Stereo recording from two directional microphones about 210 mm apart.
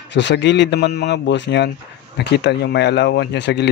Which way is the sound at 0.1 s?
55° left (ahead or behind).